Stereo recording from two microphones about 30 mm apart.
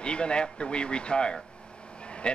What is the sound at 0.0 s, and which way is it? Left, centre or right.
Speech, left.